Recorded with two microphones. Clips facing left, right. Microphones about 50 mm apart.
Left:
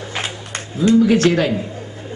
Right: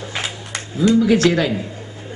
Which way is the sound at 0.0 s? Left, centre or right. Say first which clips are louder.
Left 1 dB; left.